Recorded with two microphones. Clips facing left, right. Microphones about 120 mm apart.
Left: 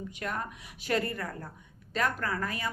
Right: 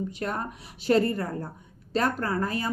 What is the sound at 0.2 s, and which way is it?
Speech, 30° right (ahead or behind).